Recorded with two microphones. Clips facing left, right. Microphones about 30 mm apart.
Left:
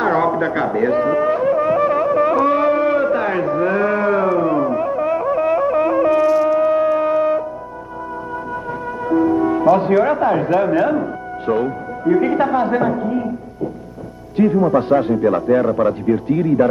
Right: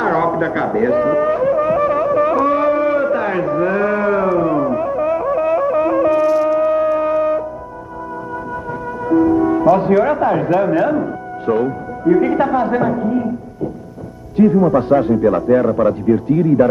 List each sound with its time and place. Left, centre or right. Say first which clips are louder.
0.0 s a sound: right 1 dB; centre
9.1 s music: right 2 dB; centre
9.9 s a man's voice: right 1 dB; centre
14.3 s a man's voice: right 2 dB; left
15.1 s a man's voice: right 2 dB; centre
15.9 s speech: right 2 dB; left